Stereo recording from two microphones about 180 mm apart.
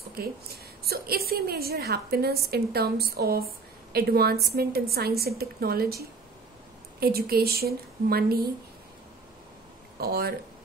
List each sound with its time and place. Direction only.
0.1 s a woman's voice: 60° right (ahead or behind)
7.0 s a woman's voice: 60° right (ahead or behind)
9.9 s speech: 60° right (ahead or behind)